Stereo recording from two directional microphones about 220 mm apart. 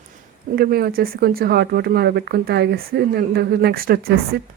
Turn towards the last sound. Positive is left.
turn(degrees=-45)  # may be behind; listen again after turning